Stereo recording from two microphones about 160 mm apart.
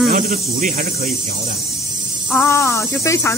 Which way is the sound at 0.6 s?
60° right (ahead or behind).